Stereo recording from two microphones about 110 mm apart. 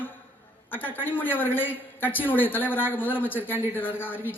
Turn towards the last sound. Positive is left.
turn(degrees=20)  # may be behind; listen again after turning